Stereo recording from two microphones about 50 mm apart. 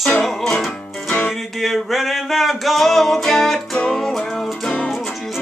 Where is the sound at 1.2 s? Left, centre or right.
Centre.